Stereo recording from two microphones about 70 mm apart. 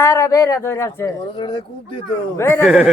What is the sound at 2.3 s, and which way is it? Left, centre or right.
Speech, left.